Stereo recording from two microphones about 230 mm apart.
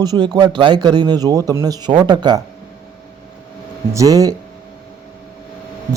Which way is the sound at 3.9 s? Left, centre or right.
Centre.